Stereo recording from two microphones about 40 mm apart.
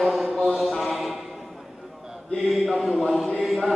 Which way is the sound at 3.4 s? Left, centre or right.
Centre.